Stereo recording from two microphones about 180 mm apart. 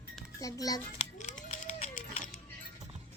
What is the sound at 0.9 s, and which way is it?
Music, 40° left (ahead or behind).